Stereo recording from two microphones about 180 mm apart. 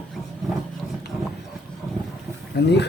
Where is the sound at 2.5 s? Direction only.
70° left (ahead or behind).